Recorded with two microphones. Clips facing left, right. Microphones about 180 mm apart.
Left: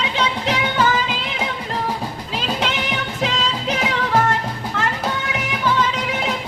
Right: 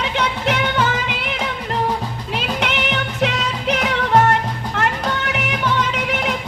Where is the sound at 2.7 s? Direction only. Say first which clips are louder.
Right 2 dB; 65° right (ahead or behind).